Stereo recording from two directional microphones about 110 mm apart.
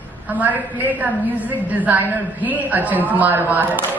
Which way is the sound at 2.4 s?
15° right (ahead or behind).